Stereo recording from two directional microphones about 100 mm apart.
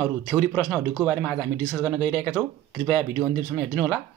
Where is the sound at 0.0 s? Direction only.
15° left (ahead or behind).